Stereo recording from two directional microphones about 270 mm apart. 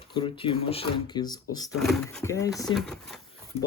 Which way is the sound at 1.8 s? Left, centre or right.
Centre.